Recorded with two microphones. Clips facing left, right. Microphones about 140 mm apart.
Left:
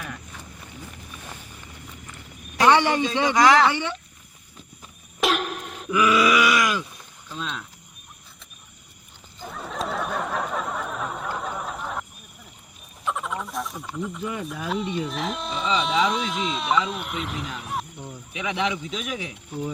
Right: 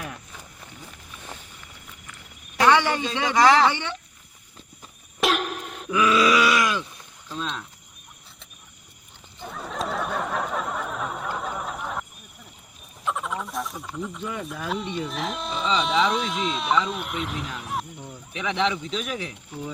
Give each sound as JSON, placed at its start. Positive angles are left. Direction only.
{"t": 2.6, "sound": "a man's voice", "side_deg": 15}
{"t": 5.2, "sound": "a sound", "side_deg": 0}
{"t": 6.0, "sound": "groan", "side_deg": 10}
{"t": 7.3, "sound": "speech", "side_deg": 0}
{"t": 9.4, "sound": "a sound", "side_deg": 0}
{"t": 13.1, "sound": "speech", "side_deg": 0}
{"t": 18.0, "sound": "speech", "side_deg": 10}